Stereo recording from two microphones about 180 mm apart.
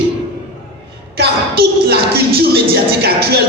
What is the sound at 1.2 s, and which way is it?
Music, 65° right (ahead or behind).